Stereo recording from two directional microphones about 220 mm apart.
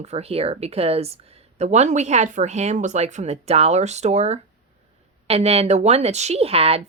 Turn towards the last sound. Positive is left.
turn(degrees=-25)  # may be behind; listen again after turning